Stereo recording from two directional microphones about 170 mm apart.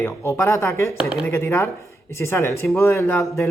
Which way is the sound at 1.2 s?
15° left (ahead or behind).